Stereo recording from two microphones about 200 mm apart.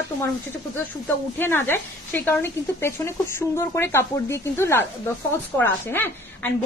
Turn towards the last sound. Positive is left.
turn(degrees=10)  # may be behind; listen again after turning